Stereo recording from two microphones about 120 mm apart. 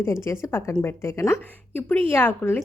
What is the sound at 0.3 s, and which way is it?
A woman's voice, 25° left (ahead or behind).